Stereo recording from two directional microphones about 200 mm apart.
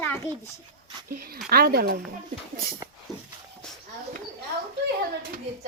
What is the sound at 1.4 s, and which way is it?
Speech, 50° right (ahead or behind).